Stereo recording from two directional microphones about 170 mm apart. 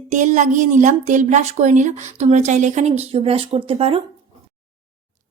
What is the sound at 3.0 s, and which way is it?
Speech, 35° right (ahead or behind).